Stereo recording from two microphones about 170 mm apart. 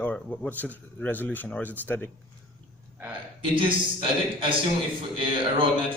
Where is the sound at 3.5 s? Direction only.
30° right (ahead or behind).